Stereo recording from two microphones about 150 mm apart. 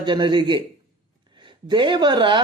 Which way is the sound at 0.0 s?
30° right (ahead or behind).